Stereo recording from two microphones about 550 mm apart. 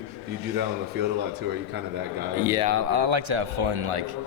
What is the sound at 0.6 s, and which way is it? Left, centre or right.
A man's voice, centre.